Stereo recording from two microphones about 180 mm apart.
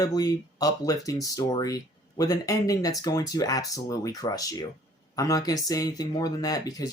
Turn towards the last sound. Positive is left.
turn(degrees=20)  # may be behind; listen again after turning